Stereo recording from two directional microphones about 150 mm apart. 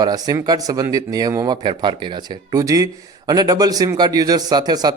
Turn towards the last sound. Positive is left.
turn(degrees=-25)  # may be behind; listen again after turning